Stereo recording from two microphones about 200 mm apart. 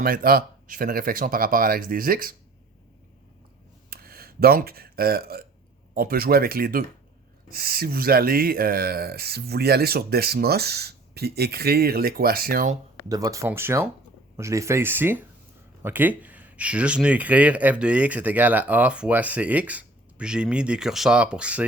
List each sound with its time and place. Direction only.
0.0 s speech: 45° right (ahead or behind)
3.8 s a sound: 50° right (ahead or behind)
5.9 s speech: 45° right (ahead or behind)
13.1 s speech: 15° right (ahead or behind)